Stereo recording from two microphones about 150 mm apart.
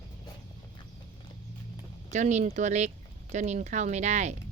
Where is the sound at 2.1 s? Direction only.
50° right (ahead or behind).